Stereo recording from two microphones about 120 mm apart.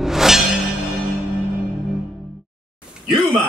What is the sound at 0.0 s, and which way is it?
Music, 5° right (ahead or behind).